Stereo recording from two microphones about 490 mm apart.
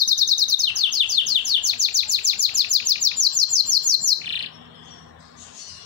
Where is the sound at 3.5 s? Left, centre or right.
Right.